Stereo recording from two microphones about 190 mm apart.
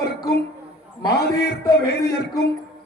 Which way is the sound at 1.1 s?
60° left (ahead or behind).